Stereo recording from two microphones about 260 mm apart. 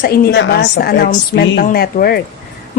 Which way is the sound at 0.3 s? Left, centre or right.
Left.